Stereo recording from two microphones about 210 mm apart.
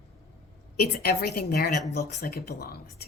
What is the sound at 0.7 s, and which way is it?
Speech, 50° left (ahead or behind).